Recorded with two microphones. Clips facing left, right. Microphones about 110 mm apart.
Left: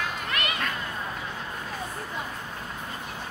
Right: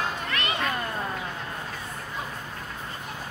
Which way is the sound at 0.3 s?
30° right (ahead or behind).